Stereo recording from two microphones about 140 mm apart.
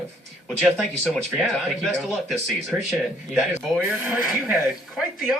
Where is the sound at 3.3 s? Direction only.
10° right (ahead or behind).